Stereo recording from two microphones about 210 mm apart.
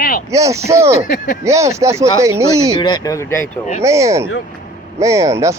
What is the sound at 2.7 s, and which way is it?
Speech, 20° left (ahead or behind).